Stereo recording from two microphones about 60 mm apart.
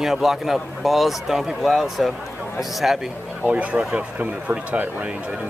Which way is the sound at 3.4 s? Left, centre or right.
Right.